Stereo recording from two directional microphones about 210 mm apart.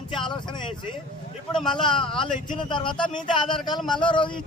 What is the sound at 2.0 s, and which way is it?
A man's voice, 25° left (ahead or behind).